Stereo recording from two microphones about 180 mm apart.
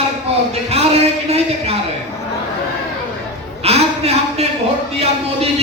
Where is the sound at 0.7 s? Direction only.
35° right (ahead or behind).